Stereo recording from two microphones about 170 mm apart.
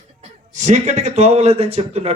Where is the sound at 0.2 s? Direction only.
45° right (ahead or behind).